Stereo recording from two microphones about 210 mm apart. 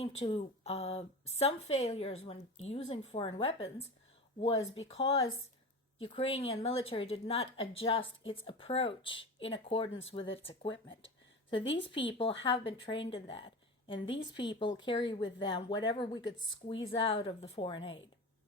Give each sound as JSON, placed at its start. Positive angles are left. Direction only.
{"t": 0.0, "sound": "a woman's voice", "side_deg": 30}
{"t": 4.9, "sound": "a woman's voice", "side_deg": 30}